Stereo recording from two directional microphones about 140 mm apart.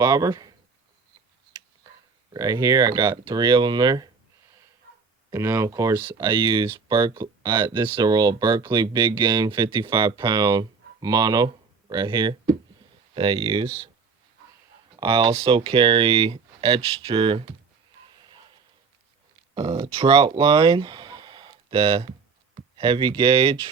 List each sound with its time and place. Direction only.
0.0 s speech: 25° right (ahead or behind)
1.5 s a sound: 30° right (ahead or behind)
2.3 s speech: 25° right (ahead or behind)
5.3 s speech: 20° right (ahead or behind); by 13.9 s 35° right (ahead or behind)
14.9 s speech: 35° right (ahead or behind)
18.2 s a sound: 35° right (ahead or behind)
19.5 s speech: 40° right (ahead or behind)
20.3 s a sound: 40° right (ahead or behind)
22.8 s speech: 35° right (ahead or behind)